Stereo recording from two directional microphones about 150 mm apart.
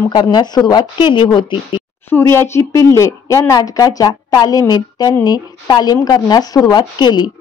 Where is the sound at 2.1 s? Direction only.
15° left (ahead or behind).